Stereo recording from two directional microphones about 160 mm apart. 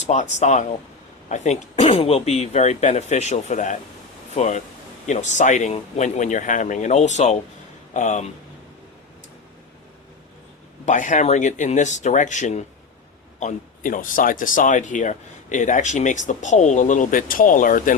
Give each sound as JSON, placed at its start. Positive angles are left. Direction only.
{"t": 0.0, "sound": "speech", "side_deg": 45}
{"t": 10.8, "sound": "speech", "side_deg": 50}